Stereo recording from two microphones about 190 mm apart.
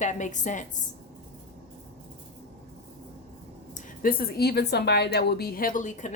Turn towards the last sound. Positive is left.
turn(degrees=40)  # may be behind; listen again after turning